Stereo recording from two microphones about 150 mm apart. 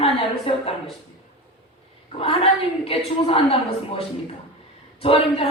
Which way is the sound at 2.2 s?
40° left (ahead or behind).